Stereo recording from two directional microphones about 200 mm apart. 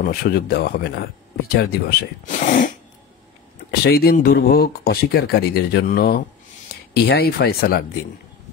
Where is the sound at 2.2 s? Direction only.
40° left (ahead or behind).